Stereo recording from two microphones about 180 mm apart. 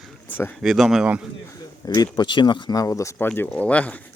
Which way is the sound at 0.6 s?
5° right (ahead or behind).